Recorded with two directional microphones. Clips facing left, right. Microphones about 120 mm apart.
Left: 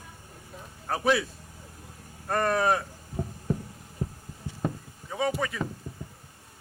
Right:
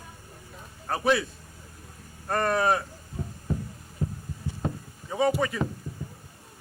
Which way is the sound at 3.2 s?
45° left (ahead or behind).